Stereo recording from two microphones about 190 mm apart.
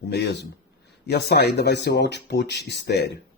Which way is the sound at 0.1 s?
60° left (ahead or behind).